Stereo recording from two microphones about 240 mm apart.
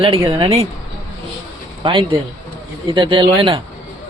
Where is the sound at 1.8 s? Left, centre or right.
Centre.